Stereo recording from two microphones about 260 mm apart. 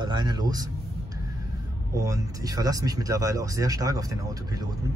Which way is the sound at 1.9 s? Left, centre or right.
Centre.